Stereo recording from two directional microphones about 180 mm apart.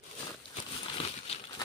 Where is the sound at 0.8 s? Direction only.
35° left (ahead or behind).